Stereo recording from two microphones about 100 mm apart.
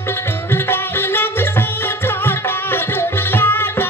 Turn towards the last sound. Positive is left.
turn(degrees=20)  # may be behind; listen again after turning